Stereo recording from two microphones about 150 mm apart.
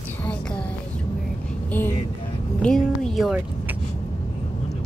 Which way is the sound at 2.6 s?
5° left (ahead or behind).